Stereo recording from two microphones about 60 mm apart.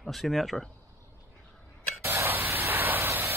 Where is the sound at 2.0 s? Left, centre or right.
Right.